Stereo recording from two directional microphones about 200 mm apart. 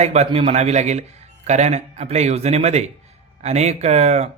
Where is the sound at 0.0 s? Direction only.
35° right (ahead or behind).